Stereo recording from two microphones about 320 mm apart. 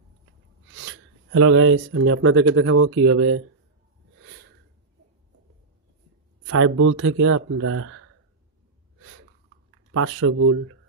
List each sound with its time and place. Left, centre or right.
0.7 s speech: right
6.4 s speech: right
9.9 s speech: right